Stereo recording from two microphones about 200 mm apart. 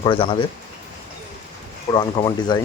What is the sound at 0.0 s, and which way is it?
Speech, 25° left (ahead or behind).